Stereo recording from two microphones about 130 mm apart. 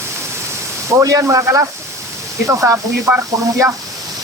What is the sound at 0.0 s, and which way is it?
Pink noise, 20° right (ahead or behind).